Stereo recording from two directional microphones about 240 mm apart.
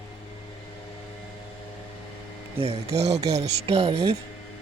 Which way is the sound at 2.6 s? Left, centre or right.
Right.